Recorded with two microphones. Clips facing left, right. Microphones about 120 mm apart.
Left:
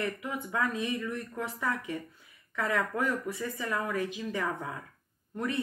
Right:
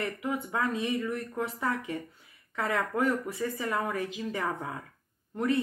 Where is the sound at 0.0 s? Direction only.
20° right (ahead or behind).